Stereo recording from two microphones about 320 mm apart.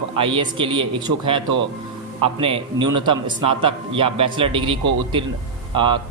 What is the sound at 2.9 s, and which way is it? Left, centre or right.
Speech, right.